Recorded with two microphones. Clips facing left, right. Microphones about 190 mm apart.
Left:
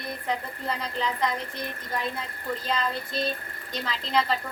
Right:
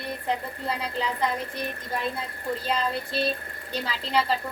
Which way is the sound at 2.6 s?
30° right (ahead or behind).